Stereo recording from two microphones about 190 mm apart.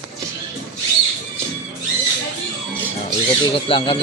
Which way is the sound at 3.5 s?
30° left (ahead or behind).